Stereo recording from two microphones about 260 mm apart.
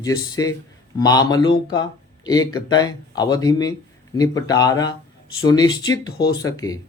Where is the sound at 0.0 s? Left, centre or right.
Centre.